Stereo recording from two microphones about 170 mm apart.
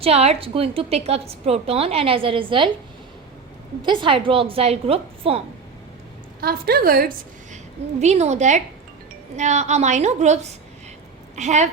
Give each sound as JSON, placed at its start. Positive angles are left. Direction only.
{"t": 0.0, "sound": "a woman's voice", "side_deg": -35}
{"t": 3.8, "sound": "a woman's voice", "side_deg": -30}
{"t": 6.4, "sound": "a woman's voice", "side_deg": -65}
{"t": 7.5, "sound": "a woman's voice", "side_deg": -40}